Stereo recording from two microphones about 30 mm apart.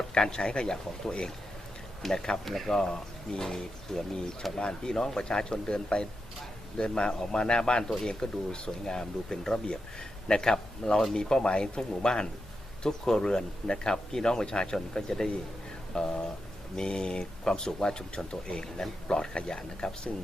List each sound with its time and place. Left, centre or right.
0.1 s speech: left
2.7 s speech: left
4.9 s speech: centre